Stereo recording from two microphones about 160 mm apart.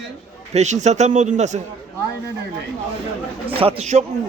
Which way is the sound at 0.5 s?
45° right (ahead or behind).